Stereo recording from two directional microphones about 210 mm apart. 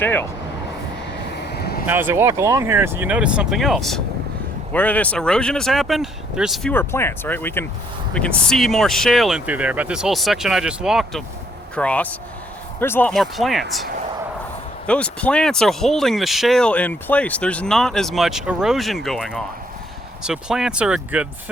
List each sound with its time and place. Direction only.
0.0 s speech: 10° left (ahead or behind)
1.5 s vehicle: 50° left (ahead or behind)
1.9 s speech: 10° right (ahead or behind)
14.8 s speech: 5° left (ahead or behind)